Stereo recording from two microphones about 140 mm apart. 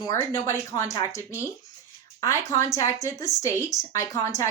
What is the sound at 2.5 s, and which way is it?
Speech, 20° left (ahead or behind).